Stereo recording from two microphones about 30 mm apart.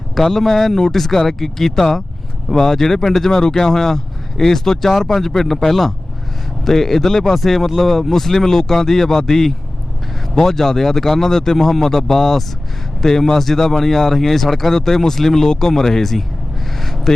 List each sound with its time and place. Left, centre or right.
0.2 s speech: centre